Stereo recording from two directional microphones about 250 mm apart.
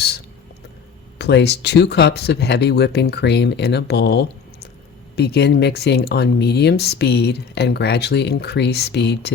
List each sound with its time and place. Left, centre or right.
1.2 s speech: left